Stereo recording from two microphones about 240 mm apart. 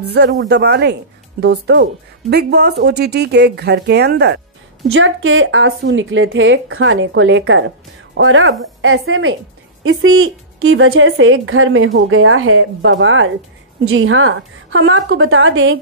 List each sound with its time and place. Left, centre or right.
0.0 s a woman's voice: right
4.8 s a woman's voice: right